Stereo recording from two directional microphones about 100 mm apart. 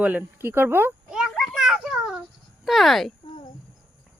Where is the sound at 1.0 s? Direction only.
5° right (ahead or behind).